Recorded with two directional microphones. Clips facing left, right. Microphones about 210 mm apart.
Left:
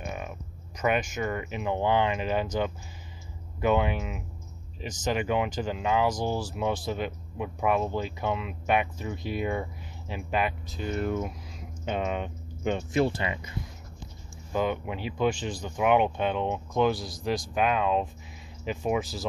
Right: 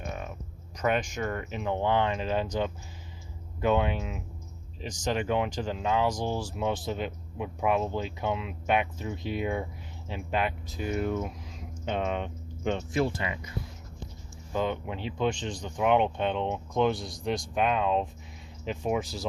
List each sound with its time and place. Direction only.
0.0 s speech: 10° left (ahead or behind)
10.8 s speech: 10° right (ahead or behind)
11.1 s speech: 5° left (ahead or behind)
12.9 s speech: 25° left (ahead or behind)
14.5 s speech: 10° left (ahead or behind)